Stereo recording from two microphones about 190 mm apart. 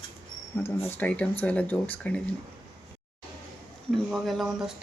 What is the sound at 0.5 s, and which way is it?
Speech, 15° left (ahead or behind).